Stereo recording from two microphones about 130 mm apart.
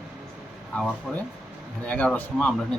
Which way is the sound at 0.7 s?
10° left (ahead or behind).